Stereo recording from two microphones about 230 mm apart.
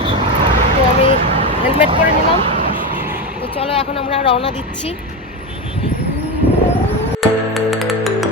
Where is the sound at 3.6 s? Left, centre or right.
Left.